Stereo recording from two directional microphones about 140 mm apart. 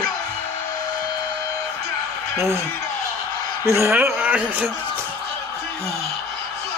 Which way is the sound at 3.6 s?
20° right (ahead or behind).